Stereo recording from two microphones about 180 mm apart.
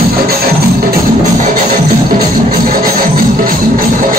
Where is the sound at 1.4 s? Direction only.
55° right (ahead or behind).